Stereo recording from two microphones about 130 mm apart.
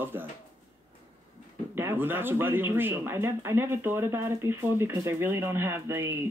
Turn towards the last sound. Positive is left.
turn(degrees=-15)  # may be behind; listen again after turning